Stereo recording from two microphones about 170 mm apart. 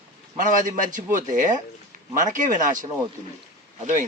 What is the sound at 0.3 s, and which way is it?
Speech, 50° right (ahead or behind).